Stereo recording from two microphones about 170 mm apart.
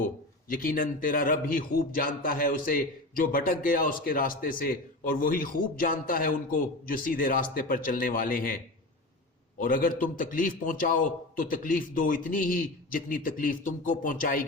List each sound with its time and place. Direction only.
0.0 s a man's voice: 55° left (ahead or behind)
9.6 s a man's voice: 55° left (ahead or behind)